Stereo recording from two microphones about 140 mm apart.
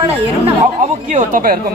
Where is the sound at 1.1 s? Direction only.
70° right (ahead or behind).